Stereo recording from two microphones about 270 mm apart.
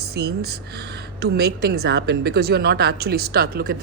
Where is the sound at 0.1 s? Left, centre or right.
Right.